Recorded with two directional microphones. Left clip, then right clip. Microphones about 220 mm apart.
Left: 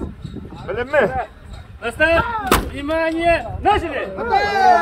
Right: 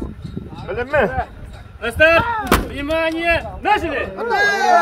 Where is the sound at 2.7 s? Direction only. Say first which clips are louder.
Right 1 dB; 50° right (ahead or behind).